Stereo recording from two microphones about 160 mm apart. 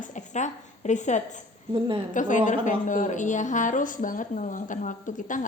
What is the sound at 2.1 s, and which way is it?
Speech, 50° left (ahead or behind).